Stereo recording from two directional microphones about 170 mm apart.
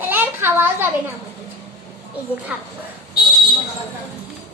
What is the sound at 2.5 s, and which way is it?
Speech, 5° right (ahead or behind).